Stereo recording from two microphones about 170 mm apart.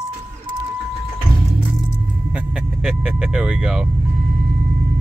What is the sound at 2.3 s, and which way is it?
Vehicle, 5° right (ahead or behind).